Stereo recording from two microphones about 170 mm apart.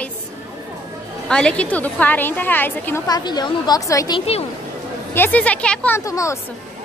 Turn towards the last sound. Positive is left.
turn(degrees=20)  # may be behind; listen again after turning